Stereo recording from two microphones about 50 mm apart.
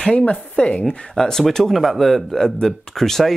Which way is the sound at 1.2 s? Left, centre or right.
Centre.